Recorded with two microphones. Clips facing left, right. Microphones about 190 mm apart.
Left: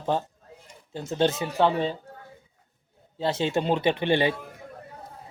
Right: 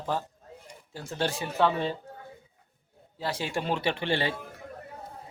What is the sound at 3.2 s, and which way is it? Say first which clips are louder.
Speech: left 6 dB; 25° left (ahead or behind).